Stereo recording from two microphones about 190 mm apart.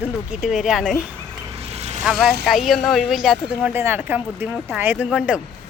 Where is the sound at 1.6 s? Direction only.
35° right (ahead or behind).